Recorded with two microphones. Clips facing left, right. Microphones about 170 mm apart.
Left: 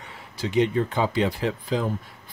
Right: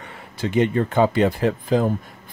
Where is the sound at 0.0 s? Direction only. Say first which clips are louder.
Right 4 dB; 55° right (ahead or behind).